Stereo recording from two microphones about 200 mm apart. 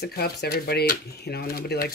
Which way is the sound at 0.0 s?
50° left (ahead or behind).